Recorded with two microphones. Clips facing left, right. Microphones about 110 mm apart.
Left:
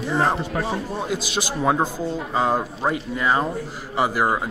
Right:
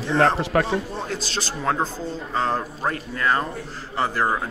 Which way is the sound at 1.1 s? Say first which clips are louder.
Left 3 dB; 10° left (ahead or behind).